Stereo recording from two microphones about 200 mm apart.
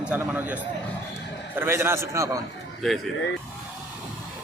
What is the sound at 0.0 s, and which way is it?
A man's voice, 5° right (ahead or behind).